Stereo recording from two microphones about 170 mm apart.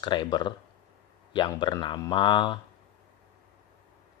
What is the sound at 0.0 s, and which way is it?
Speech, 25° left (ahead or behind).